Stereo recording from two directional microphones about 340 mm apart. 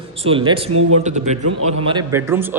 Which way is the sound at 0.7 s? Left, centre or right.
Right.